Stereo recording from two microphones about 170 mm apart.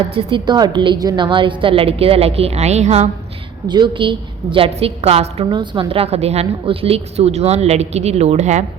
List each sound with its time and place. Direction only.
0.1 s a woman's voice: 30° right (ahead or behind)
3.7 s a woman's voice: 30° right (ahead or behind)